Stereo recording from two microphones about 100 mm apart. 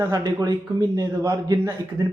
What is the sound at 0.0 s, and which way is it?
A man's voice, 40° right (ahead or behind).